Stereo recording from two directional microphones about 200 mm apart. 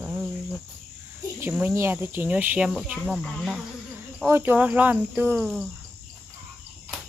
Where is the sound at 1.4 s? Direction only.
10° right (ahead or behind).